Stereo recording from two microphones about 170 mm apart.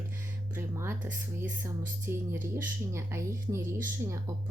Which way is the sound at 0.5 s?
15° right (ahead or behind).